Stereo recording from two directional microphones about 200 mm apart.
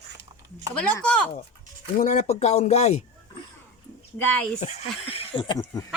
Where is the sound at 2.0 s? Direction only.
35° left (ahead or behind).